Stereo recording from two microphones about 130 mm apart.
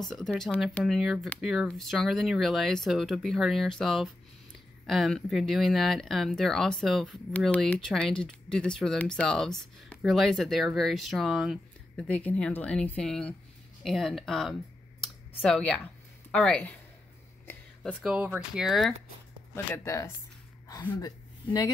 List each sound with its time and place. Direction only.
0.1 s a woman's voice: 5° left (ahead or behind)
18.0 s speech: 10° right (ahead or behind)
19.5 s speech: 20° left (ahead or behind)